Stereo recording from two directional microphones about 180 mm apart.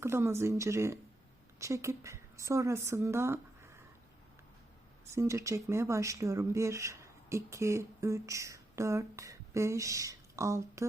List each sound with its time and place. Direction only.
0.0 s a woman's voice: 15° right (ahead or behind)
5.1 s speech: 15° right (ahead or behind)